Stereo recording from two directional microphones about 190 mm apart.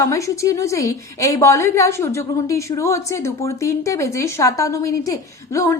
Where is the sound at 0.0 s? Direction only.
15° left (ahead or behind).